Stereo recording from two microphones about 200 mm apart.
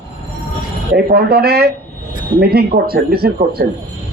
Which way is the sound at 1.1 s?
50° right (ahead or behind).